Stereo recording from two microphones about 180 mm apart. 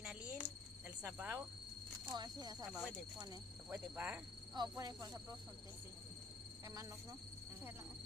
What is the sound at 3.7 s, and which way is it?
Speech, 10° right (ahead or behind).